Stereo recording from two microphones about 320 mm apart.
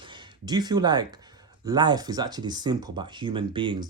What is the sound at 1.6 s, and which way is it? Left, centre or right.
Speech, centre.